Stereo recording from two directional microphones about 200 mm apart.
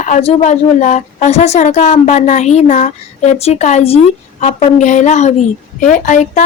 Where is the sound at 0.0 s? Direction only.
35° left (ahead or behind).